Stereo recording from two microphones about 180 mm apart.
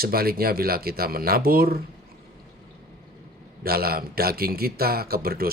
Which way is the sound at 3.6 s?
55° right (ahead or behind).